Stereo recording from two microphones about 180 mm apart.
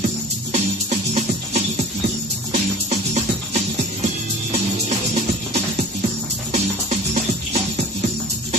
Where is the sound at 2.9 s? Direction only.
40° right (ahead or behind).